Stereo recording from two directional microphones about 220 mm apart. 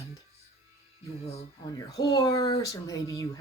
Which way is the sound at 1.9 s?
15° left (ahead or behind).